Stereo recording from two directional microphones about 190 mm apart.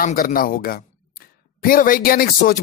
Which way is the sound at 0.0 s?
50° left (ahead or behind).